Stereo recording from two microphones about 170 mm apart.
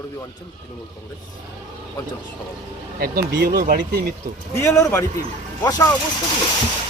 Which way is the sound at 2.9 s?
60° right (ahead or behind).